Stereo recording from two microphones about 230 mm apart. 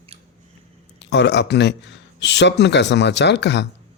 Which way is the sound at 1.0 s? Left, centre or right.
Left.